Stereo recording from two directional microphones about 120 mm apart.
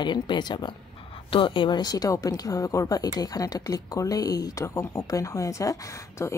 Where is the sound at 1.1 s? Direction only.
45° left (ahead or behind).